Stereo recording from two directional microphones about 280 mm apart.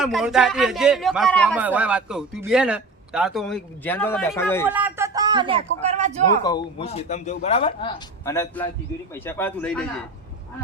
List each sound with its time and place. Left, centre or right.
0.0 s a man's voice: centre
4.6 s speech: centre; by 6.4 s right
6.4 s a man's voice: centre